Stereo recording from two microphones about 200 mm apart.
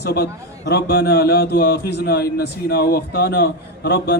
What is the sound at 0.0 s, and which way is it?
A man's voice, 50° left (ahead or behind).